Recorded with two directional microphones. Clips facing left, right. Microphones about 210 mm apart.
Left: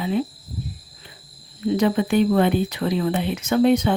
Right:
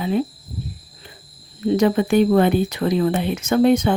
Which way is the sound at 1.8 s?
45° right (ahead or behind).